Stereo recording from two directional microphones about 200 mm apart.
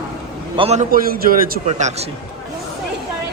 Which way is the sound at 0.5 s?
30° right (ahead or behind).